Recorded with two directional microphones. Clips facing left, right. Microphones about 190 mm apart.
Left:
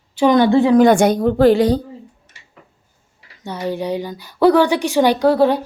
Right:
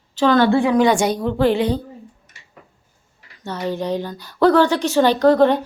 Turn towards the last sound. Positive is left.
turn(degrees=10)  # may be behind; listen again after turning